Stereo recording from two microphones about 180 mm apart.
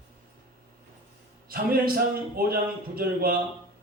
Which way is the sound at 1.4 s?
55° right (ahead or behind).